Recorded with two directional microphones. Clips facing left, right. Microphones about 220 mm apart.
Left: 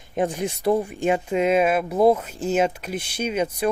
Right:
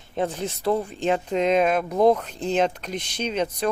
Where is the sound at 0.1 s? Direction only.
15° left (ahead or behind).